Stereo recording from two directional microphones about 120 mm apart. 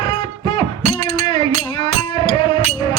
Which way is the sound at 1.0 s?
65° right (ahead or behind).